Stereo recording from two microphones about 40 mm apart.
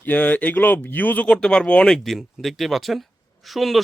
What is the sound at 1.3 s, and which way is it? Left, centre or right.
Speech, left.